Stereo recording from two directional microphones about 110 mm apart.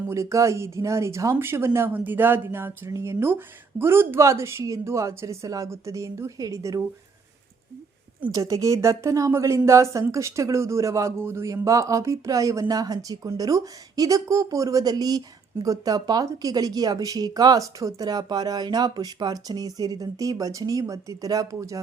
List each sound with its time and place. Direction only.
0.1 s a woman's voice: 30° right (ahead or behind)
8.3 s a woman's voice: 30° right (ahead or behind)